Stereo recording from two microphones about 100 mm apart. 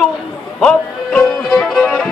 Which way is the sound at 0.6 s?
5° left (ahead or behind).